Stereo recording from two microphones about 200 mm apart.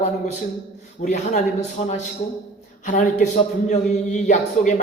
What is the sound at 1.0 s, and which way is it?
A man's voice, 40° left (ahead or behind).